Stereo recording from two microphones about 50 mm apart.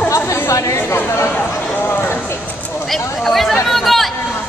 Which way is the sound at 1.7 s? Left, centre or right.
Left.